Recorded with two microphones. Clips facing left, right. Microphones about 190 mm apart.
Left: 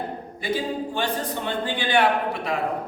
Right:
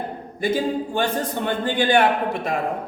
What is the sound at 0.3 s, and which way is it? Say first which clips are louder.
A man's voice: right 5 dB; 45° right (ahead or behind).